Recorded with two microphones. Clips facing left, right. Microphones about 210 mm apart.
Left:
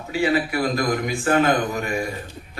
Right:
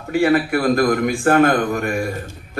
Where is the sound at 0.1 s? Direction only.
55° right (ahead or behind).